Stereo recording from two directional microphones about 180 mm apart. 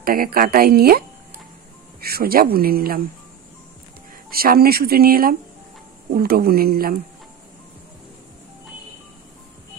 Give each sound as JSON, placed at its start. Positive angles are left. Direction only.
{"t": 0.0, "sound": "a woman's voice", "side_deg": -55}
{"t": 4.3, "sound": "a woman's voice", "side_deg": -55}